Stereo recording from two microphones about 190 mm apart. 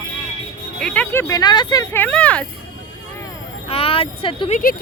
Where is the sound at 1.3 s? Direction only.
20° left (ahead or behind).